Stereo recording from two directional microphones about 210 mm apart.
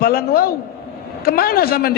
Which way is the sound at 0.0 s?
45° left (ahead or behind).